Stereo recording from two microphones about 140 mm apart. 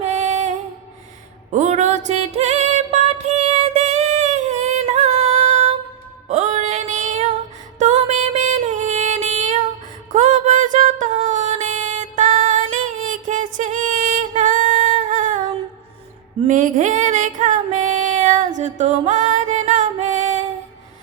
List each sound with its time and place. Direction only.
0.0 s music: 60° right (ahead or behind)
1.5 s music: 55° right (ahead or behind)
16.5 s female singing: 65° right (ahead or behind)